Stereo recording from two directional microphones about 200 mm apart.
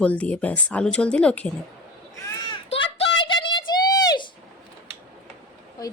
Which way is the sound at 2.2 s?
20° left (ahead or behind).